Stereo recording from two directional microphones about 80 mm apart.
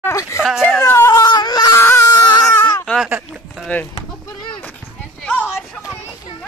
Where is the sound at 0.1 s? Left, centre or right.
Left.